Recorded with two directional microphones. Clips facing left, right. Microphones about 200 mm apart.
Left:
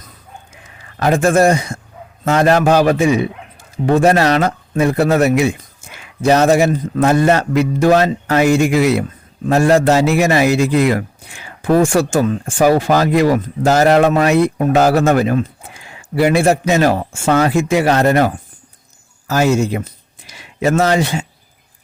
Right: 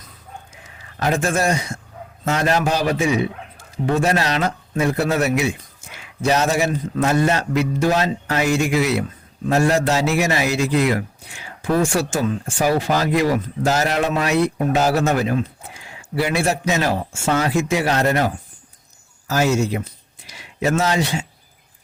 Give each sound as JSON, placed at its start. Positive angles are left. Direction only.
{"t": 0.9, "sound": "a man's voice", "side_deg": 55}
{"t": 5.8, "sound": "a sound", "side_deg": 55}
{"t": 6.2, "sound": "a man's voice", "side_deg": 55}
{"t": 19.3, "sound": "a man's voice", "side_deg": 55}